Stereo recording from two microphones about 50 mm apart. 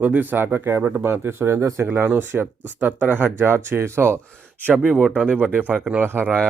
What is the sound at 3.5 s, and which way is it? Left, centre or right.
Speech, right.